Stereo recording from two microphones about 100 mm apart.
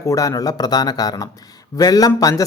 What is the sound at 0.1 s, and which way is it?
Speech, 35° left (ahead or behind).